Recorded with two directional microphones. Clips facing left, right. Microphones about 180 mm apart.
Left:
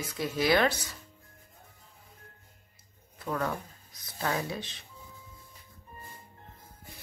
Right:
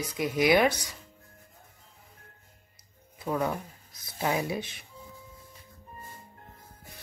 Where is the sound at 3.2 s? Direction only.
10° right (ahead or behind).